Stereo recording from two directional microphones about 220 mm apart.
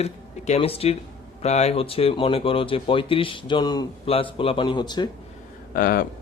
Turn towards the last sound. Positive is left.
turn(degrees=40)  # may be behind; listen again after turning